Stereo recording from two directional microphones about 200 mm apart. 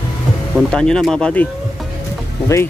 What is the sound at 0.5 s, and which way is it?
Speech, 5° left (ahead or behind).